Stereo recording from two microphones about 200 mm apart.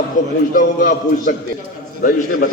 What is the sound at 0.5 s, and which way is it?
A man's voice, 45° left (ahead or behind).